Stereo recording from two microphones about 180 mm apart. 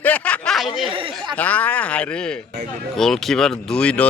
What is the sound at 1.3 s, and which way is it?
Speech, 10° left (ahead or behind).